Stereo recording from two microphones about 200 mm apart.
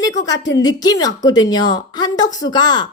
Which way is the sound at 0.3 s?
65° left (ahead or behind).